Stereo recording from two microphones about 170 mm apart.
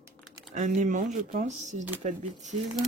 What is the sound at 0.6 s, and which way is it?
Speech, 45° right (ahead or behind).